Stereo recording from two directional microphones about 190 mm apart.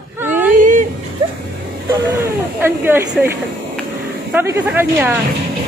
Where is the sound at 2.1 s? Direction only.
10° right (ahead or behind).